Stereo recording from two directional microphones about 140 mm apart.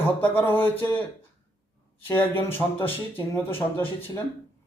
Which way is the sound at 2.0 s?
15° left (ahead or behind).